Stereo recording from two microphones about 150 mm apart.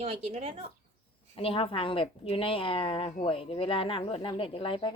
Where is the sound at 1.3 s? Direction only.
35° left (ahead or behind).